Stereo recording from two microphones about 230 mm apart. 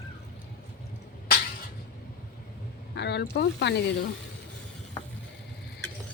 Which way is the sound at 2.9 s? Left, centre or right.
Left.